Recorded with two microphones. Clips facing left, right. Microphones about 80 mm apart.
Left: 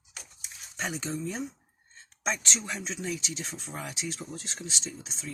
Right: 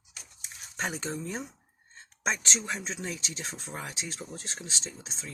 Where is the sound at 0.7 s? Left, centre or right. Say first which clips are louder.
Even; right.